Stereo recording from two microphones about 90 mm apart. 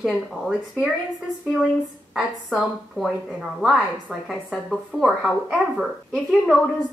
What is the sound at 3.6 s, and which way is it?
Speech, 10° right (ahead or behind).